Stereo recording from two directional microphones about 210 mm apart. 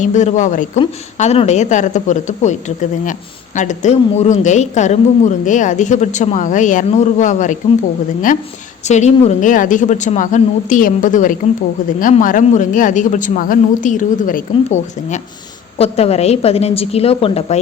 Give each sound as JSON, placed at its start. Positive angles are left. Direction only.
{"t": 0.0, "sound": "a woman's voice", "side_deg": 35}